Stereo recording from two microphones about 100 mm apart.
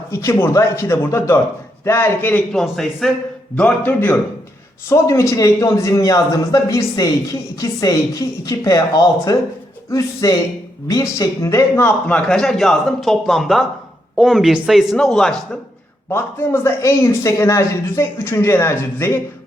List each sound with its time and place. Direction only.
0.1 s speech: 30° left (ahead or behind)
2.5 s speech: 5° left (ahead or behind)
3.5 s a man's voice: 15° left (ahead or behind)
4.9 s a man's voice: 30° left (ahead or behind)
11.7 s speech: 20° left (ahead or behind)
16.0 s speech: 25° left (ahead or behind)